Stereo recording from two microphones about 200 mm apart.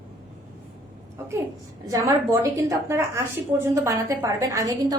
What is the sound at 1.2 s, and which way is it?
A woman's voice, 15° right (ahead or behind).